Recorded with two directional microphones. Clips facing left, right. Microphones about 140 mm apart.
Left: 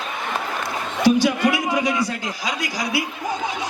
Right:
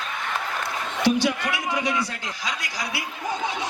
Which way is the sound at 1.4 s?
15° left (ahead or behind).